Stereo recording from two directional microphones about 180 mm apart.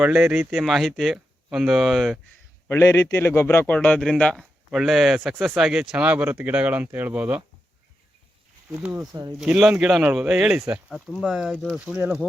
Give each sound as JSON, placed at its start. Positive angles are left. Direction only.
{"t": 0.0, "sound": "speech", "side_deg": -5}
{"t": 2.6, "sound": "a man's voice", "side_deg": 15}
{"t": 9.0, "sound": "speech", "side_deg": -15}
{"t": 9.4, "sound": "speech", "side_deg": -5}